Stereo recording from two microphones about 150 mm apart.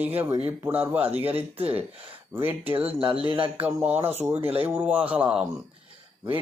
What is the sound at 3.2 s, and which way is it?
Speech, 35° right (ahead or behind).